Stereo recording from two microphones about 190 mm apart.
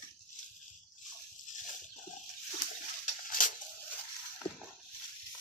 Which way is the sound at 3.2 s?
45° left (ahead or behind).